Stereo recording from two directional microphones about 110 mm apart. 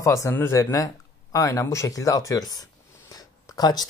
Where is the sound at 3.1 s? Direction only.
35° left (ahead or behind).